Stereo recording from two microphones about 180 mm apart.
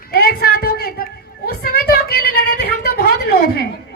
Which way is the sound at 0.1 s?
55° left (ahead or behind).